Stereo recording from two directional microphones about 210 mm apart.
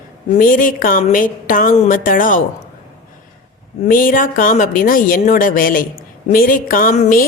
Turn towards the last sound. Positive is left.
turn(degrees=40)  # may be behind; listen again after turning